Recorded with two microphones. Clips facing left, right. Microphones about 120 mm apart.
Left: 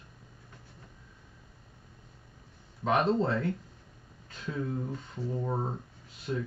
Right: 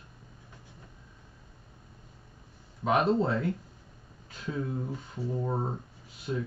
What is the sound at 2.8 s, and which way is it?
Speech, 10° right (ahead or behind).